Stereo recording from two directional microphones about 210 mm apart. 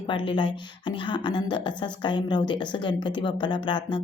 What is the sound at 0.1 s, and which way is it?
Speech, 25° left (ahead or behind).